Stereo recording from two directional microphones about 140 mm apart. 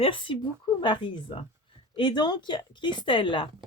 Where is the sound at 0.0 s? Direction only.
40° left (ahead or behind).